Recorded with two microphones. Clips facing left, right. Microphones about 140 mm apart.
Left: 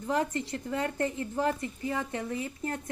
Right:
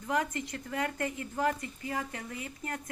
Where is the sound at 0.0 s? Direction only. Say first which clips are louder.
Left 2 dB; 30° left (ahead or behind).